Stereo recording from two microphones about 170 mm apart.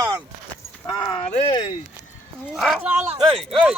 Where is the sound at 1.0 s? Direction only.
30° left (ahead or behind).